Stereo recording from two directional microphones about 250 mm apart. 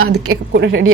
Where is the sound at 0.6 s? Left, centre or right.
Right.